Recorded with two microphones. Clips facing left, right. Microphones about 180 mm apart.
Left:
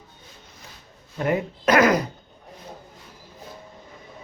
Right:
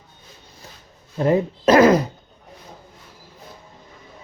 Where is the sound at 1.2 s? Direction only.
30° right (ahead or behind).